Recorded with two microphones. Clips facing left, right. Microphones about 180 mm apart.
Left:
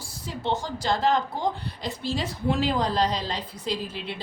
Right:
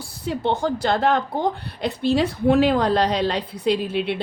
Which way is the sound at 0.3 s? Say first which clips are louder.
Right 7 dB; 60° right (ahead or behind).